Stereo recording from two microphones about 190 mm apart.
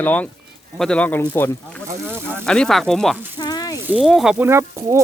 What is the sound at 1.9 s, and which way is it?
Speech, 10° right (ahead or behind).